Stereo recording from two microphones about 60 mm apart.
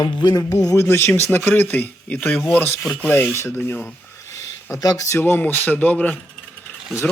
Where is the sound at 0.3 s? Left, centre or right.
Left.